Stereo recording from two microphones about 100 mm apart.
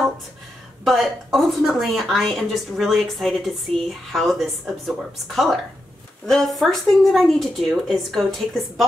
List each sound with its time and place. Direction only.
0.8 s a woman's voice: centre (ahead or behind)